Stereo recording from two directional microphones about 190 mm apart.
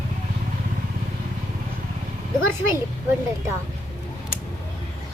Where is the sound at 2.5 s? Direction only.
15° right (ahead or behind).